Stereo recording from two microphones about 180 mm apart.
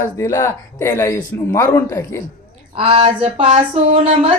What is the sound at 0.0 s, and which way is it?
Speech, 15° left (ahead or behind).